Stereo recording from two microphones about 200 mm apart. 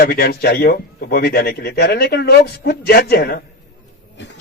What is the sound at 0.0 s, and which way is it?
A man's voice, 45° left (ahead or behind).